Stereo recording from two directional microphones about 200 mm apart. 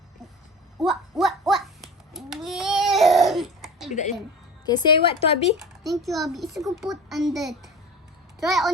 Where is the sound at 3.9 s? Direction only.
35° left (ahead or behind).